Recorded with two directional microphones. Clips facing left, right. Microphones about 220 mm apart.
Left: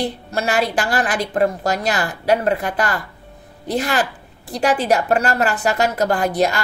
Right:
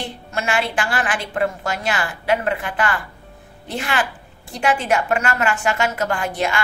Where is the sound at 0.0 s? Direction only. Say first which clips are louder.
Left 5 dB; 40° left (ahead or behind).